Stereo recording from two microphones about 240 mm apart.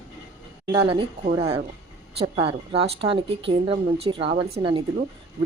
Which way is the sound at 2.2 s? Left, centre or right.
Right.